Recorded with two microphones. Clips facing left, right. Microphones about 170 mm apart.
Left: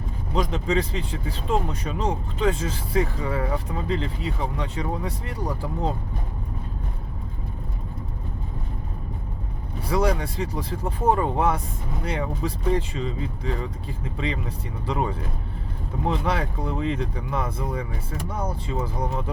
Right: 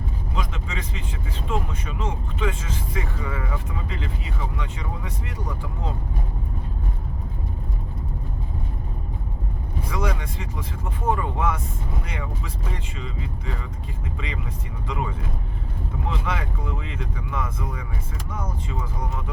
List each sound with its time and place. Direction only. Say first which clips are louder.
0.3 s speech: left 10 dB; 35° left (ahead or behind)
9.9 s speech: left 6 dB; 35° left (ahead or behind)